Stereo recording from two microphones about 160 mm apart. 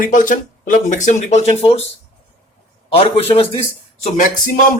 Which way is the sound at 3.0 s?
40° left (ahead or behind).